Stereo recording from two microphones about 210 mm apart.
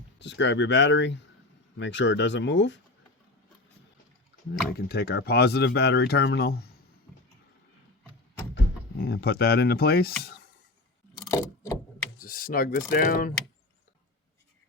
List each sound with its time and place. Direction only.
0.2 s speech: 55° left (ahead or behind)
4.7 s speech: 50° left (ahead or behind)
8.5 s speech: 50° left (ahead or behind)
11.2 s a sound: 15° left (ahead or behind)
12.2 s speech: 40° left (ahead or behind)